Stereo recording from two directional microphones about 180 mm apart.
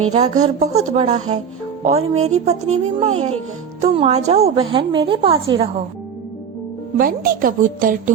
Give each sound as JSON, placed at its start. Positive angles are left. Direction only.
{"t": 0.1, "sound": "a woman's voice", "side_deg": -40}
{"t": 6.9, "sound": "a woman's voice", "side_deg": -50}